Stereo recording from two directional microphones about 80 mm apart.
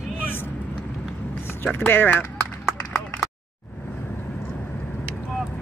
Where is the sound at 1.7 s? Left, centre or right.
Left.